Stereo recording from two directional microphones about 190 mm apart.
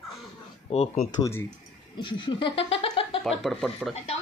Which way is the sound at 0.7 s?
35° left (ahead or behind).